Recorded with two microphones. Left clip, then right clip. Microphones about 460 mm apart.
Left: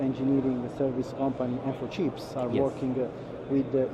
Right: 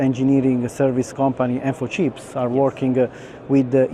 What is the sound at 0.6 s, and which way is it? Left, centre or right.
A man's voice, right.